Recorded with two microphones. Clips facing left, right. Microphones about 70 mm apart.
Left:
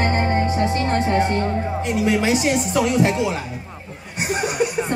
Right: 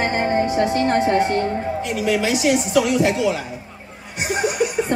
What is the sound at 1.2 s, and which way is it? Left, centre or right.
A woman's voice, left.